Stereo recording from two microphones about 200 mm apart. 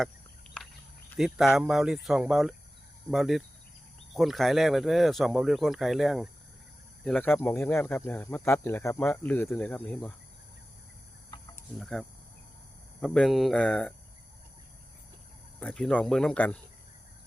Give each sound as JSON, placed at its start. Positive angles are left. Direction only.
{"t": 1.2, "sound": "speech", "side_deg": 0}
{"t": 11.3, "sound": "cricket", "side_deg": 20}
{"t": 11.8, "sound": "speech", "side_deg": 0}
{"t": 15.6, "sound": "speech", "side_deg": 5}